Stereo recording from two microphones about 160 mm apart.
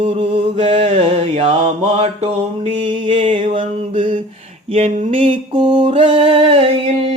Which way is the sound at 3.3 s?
30° right (ahead or behind).